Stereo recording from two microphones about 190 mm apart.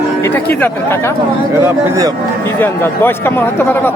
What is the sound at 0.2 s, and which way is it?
Speech, 10° left (ahead or behind).